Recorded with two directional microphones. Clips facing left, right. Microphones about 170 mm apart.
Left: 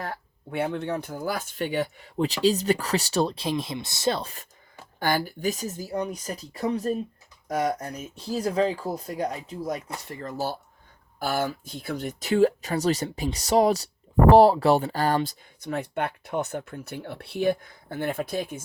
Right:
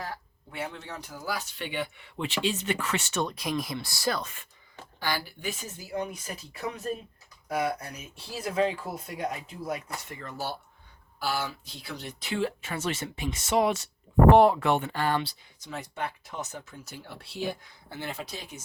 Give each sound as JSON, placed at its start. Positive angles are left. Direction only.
{"t": 0.0, "sound": "speech", "side_deg": 55}
{"t": 4.9, "sound": "speech", "side_deg": 50}